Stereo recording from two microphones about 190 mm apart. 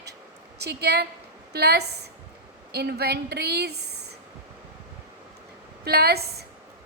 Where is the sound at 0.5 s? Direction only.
60° right (ahead or behind).